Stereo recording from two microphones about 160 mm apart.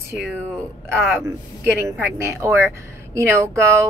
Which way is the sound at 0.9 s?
15° right (ahead or behind).